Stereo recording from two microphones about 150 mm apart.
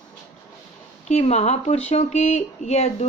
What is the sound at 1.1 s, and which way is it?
A woman's voice, 45° left (ahead or behind).